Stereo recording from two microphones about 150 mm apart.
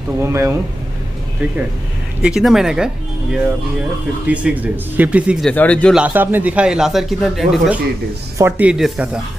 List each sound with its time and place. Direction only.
0.2 s speech: 15° right (ahead or behind)
4.3 s speech: 10° right (ahead or behind)
5.5 s speech: 10° left (ahead or behind)
5.9 s speech: 10° right (ahead or behind)
8.4 s speech: 10° right (ahead or behind)